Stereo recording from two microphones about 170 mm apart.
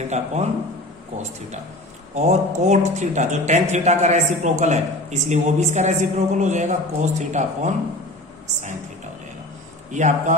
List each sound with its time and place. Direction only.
0.1 s speech: 40° right (ahead or behind)
2.1 s speech: 45° right (ahead or behind)
9.9 s speech: 45° right (ahead or behind)